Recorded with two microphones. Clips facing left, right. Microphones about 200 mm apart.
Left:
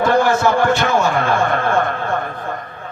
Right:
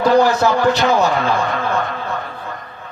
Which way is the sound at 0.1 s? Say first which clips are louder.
Right 3 dB; 55° left (ahead or behind).